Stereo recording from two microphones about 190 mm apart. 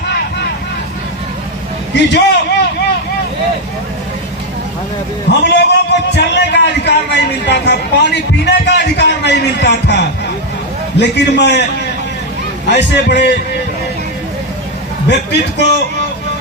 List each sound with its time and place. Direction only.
1.9 s a man's voice: 65° left (ahead or behind)
5.4 s a man's voice: 65° left (ahead or behind)
12.7 s a man's voice: 60° left (ahead or behind)
15.1 s a man's voice: 65° left (ahead or behind)